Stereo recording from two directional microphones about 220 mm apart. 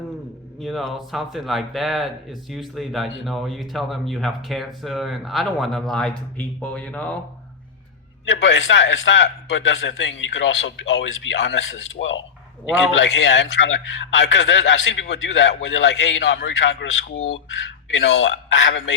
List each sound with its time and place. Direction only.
0.6 s speech: centre (ahead or behind)
8.3 s a man's voice: 55° left (ahead or behind)
17.9 s a man's voice: 60° left (ahead or behind)